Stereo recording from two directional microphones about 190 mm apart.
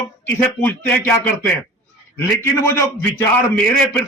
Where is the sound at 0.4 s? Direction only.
10° left (ahead or behind).